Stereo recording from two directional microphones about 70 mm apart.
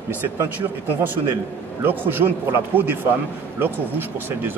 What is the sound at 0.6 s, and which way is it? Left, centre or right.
A man's voice, right.